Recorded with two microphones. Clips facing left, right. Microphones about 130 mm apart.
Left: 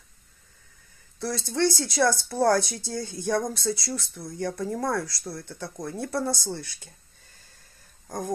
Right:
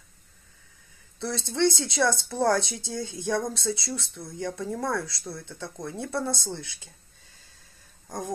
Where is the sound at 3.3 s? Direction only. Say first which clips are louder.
Left 2 dB; centre (ahead or behind).